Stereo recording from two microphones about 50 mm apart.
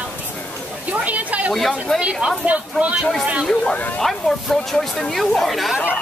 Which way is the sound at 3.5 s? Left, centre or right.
Centre.